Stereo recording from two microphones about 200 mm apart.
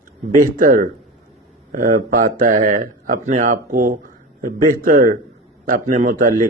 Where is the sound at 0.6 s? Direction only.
45° right (ahead or behind).